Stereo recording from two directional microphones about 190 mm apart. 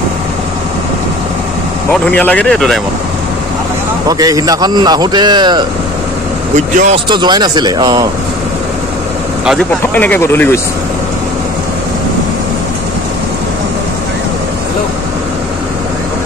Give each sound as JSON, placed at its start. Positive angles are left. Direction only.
{"t": 2.0, "sound": "speech", "side_deg": 5}
{"t": 4.1, "sound": "a man's voice", "side_deg": -20}
{"t": 6.5, "sound": "speech", "side_deg": -40}
{"t": 7.1, "sound": "a man's voice", "side_deg": -25}
{"t": 9.9, "sound": "speech", "side_deg": 10}